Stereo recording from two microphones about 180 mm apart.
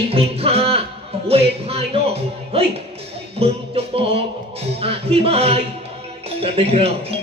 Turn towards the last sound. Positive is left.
turn(degrees=-35)  # may be behind; listen again after turning